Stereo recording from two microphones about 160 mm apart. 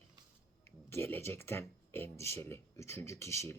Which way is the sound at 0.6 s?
15° left (ahead or behind).